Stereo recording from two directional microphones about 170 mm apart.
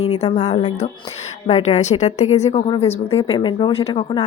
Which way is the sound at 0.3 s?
40° left (ahead or behind).